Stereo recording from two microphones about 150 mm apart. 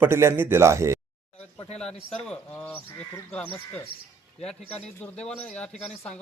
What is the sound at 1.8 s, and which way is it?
Speech, 5° left (ahead or behind).